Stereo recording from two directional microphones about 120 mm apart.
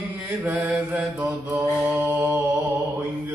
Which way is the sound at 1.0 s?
Centre (ahead or behind).